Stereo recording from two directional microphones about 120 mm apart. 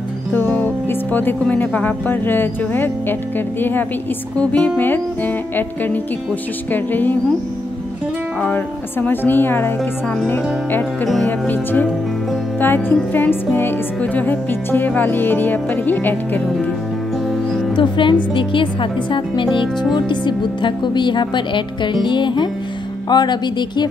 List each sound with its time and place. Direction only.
0.3 s speech: 15° left (ahead or behind)
8.4 s speech: 10° left (ahead or behind)
17.7 s speech: 40° left (ahead or behind)